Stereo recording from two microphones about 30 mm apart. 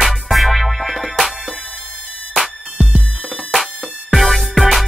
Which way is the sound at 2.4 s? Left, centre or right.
Centre.